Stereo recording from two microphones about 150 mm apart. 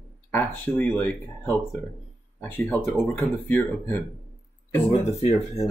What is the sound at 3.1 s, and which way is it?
Speech, 15° left (ahead or behind).